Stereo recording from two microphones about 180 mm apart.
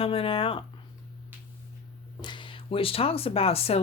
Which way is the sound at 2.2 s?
25° left (ahead or behind).